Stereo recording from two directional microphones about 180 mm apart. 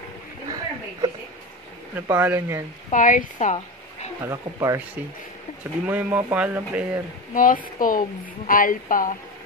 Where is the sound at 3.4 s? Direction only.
40° left (ahead or behind).